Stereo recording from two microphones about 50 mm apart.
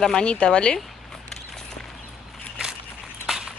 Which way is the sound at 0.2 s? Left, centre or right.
Left.